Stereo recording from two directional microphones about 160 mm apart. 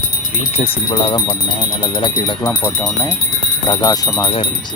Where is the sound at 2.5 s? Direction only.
15° left (ahead or behind); by 4.4 s 35° left (ahead or behind).